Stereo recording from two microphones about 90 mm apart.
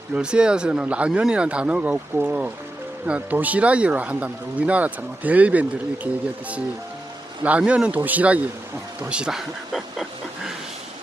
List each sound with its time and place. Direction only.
0.1 s speech: 10° right (ahead or behind)
7.6 s speech: 10° right (ahead or behind)